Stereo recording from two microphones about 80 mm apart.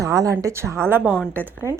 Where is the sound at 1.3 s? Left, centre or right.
Right.